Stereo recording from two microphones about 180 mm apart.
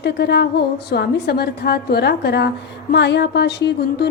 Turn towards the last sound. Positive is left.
turn(degrees=70)  # may be behind; listen again after turning